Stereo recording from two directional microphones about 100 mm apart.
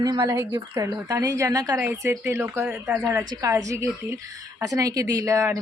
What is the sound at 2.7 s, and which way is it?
Speech, 10° right (ahead or behind).